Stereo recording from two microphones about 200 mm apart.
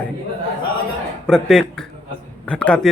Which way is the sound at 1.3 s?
5° left (ahead or behind).